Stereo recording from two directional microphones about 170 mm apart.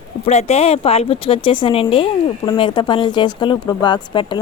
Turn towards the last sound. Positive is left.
turn(degrees=25)  # may be behind; listen again after turning